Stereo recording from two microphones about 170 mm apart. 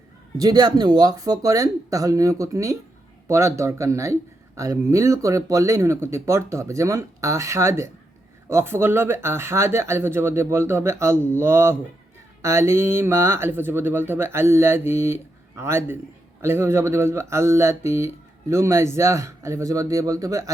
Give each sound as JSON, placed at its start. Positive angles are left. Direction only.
{"t": 0.3, "sound": "speech", "side_deg": -20}